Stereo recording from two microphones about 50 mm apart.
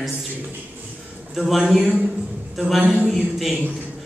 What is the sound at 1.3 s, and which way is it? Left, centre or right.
Speech, centre.